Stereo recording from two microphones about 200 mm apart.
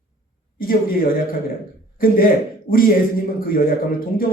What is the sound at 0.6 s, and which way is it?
A man's voice, 45° left (ahead or behind).